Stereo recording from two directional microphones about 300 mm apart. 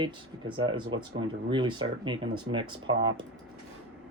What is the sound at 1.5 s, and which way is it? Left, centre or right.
Speech, centre.